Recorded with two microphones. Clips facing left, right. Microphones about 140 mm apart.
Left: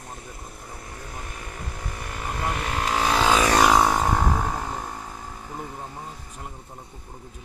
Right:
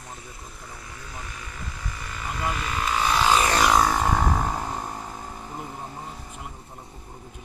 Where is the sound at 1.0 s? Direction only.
50° left (ahead or behind); by 3.5 s 90° left.